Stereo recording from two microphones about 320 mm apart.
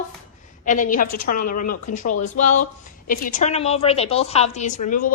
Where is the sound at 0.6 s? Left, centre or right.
Left.